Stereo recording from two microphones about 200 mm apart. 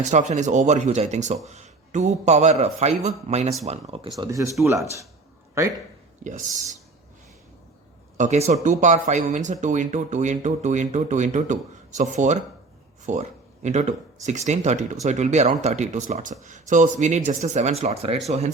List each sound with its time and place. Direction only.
0.0 s speech: 35° right (ahead or behind)
4.2 s speech: 15° right (ahead or behind)
6.2 s speech: 40° right (ahead or behind)
8.2 s speech: 35° right (ahead or behind)